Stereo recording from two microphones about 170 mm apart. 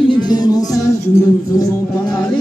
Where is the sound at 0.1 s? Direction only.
25° left (ahead or behind).